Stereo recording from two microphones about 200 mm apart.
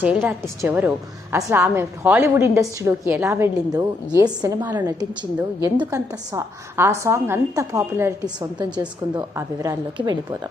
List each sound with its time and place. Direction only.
0.0 s a woman's voice: 10° right (ahead or behind)